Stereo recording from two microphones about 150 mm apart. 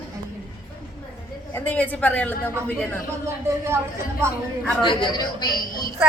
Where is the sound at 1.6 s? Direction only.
10° left (ahead or behind).